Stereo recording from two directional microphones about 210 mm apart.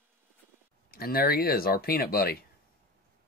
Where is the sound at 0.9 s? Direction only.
45° left (ahead or behind).